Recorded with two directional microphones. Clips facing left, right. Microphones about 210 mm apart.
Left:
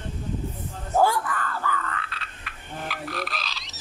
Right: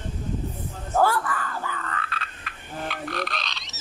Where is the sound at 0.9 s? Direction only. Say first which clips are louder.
Even; 15° left (ahead or behind).